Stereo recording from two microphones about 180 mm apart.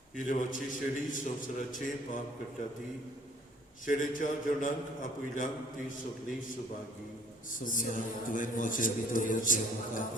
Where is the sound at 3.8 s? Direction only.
45° left (ahead or behind).